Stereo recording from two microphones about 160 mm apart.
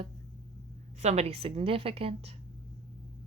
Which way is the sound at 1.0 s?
40° right (ahead or behind).